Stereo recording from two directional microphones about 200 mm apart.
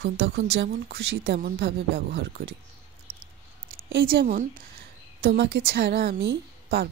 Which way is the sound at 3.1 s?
50° right (ahead or behind).